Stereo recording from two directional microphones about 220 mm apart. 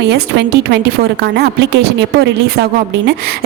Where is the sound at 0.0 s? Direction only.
50° right (ahead or behind).